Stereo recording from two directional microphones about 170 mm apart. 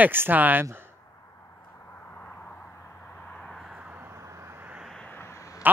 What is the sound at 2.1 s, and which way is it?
Vehicle, 10° left (ahead or behind).